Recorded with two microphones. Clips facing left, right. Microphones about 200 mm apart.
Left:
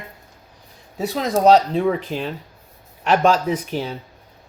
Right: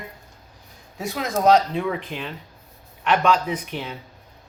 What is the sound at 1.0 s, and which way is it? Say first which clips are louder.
Speech: left 5 dB; 35° left (ahead or behind).